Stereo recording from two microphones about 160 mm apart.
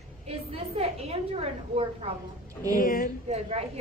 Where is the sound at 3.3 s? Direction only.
40° right (ahead or behind).